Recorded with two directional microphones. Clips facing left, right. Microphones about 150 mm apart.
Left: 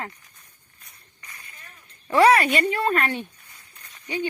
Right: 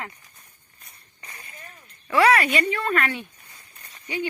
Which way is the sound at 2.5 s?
40° left (ahead or behind).